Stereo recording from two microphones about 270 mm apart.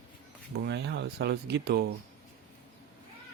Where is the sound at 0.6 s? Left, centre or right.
Right.